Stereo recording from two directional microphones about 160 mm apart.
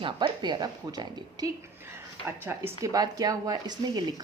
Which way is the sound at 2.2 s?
15° right (ahead or behind).